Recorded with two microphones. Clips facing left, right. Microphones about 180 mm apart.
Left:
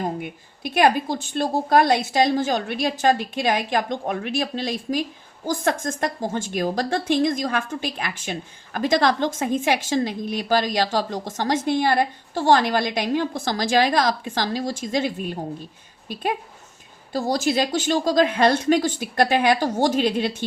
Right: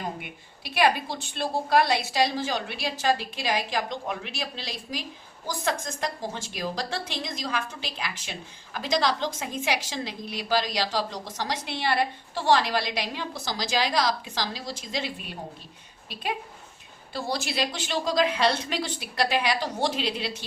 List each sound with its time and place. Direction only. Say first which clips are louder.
0.0 s a woman's voice: left 7 dB; 45° left (ahead or behind)
17.1 s a woman's voice: left 9 dB; 45° left (ahead or behind)